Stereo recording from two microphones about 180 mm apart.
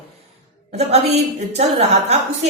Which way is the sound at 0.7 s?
35° right (ahead or behind).